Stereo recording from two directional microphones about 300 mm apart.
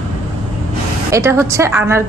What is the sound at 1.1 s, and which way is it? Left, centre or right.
Speech, centre.